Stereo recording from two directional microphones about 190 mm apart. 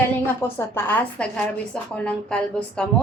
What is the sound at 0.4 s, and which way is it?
Speech, 10° left (ahead or behind).